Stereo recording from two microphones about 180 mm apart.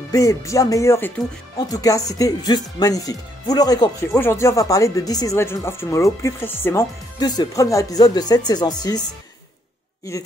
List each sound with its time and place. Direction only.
0.1 s speech: 15° left (ahead or behind)
10.1 s speech: 15° left (ahead or behind)